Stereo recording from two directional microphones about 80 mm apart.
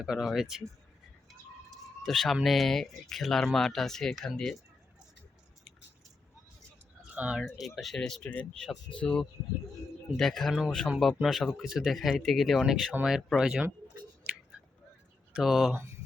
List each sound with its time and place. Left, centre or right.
0.0 s speech: centre
2.0 s speech: centre
7.1 s a sound: centre
7.8 s speech: centre
8.2 s speech: centre
15.4 s speech: centre
15.7 s mantra: right